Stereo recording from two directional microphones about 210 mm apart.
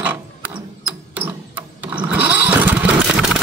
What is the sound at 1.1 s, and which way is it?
Lawn mower, 10° right (ahead or behind).